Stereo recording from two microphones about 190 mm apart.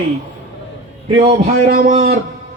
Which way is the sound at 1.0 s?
30° right (ahead or behind).